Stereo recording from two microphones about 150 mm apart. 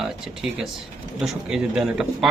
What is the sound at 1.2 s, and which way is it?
Speech, 5° right (ahead or behind).